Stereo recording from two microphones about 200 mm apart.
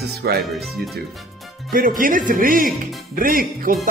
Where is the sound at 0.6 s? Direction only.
Centre (ahead or behind).